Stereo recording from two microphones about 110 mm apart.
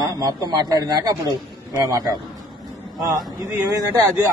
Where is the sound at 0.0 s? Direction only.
35° right (ahead or behind).